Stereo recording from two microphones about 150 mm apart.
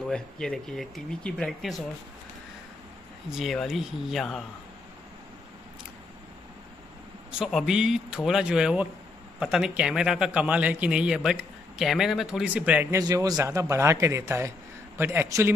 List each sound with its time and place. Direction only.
0.1 s speech: 5° left (ahead or behind)
3.3 s speech: centre (ahead or behind)
7.2 s a man's voice: centre (ahead or behind)
12.9 s a man's voice: 20° right (ahead or behind)